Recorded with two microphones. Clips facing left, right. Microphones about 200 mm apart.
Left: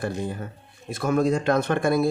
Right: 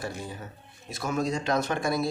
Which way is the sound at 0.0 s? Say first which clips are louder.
Left 7 dB; 55° left (ahead or behind).